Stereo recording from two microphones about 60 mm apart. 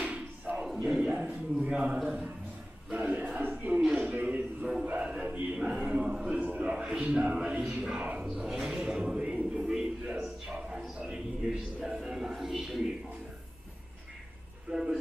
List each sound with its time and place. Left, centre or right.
0.0 s a sound: right
1.0 s a man's voice: right
8.3 s a man's voice: centre
9.5 s a sound: centre
11.0 s a man's voice: centre
14.7 s a man's voice: centre